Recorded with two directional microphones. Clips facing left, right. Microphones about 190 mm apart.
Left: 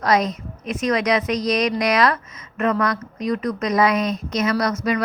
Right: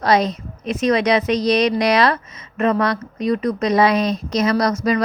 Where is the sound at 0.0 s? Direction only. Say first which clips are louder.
Right 2 dB; 30° right (ahead or behind).